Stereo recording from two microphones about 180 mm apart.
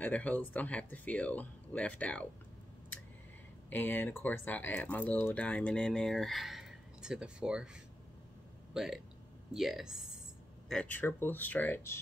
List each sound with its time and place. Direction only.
0.0 s speech: 10° left (ahead or behind)
3.7 s speech: 10° left (ahead or behind)